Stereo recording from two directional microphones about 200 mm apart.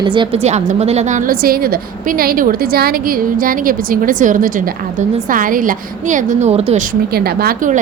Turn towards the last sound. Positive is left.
turn(degrees=-45)  # may be behind; listen again after turning